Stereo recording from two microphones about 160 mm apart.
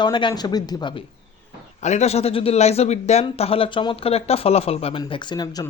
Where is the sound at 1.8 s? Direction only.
45° left (ahead or behind).